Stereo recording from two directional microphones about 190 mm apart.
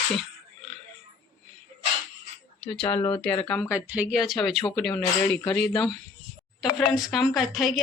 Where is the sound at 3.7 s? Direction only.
5° right (ahead or behind).